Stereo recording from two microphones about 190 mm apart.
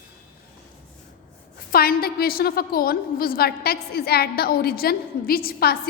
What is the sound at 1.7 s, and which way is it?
A woman's voice, 50° left (ahead or behind).